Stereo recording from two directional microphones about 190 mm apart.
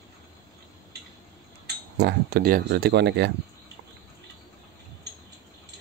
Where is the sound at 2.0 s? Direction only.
55° right (ahead or behind).